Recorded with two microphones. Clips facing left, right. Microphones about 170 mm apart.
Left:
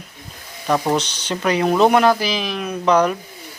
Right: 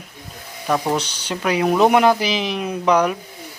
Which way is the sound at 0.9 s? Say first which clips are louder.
Left 2 dB; 10° right (ahead or behind).